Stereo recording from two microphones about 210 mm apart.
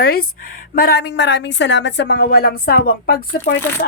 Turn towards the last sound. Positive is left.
turn(degrees=50)  # may be behind; listen again after turning